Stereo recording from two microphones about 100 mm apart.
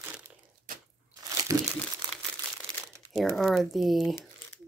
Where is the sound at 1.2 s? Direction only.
35° right (ahead or behind).